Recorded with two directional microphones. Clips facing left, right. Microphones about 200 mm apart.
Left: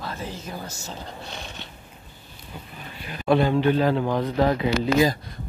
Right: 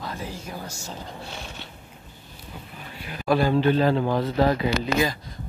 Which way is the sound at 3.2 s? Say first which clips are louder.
Left 1 dB; 20° left (ahead or behind).